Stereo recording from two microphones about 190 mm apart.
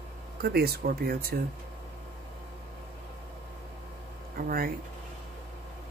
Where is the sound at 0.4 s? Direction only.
55° right (ahead or behind).